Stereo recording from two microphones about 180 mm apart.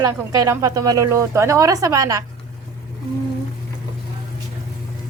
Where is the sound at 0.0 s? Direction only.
20° right (ahead or behind).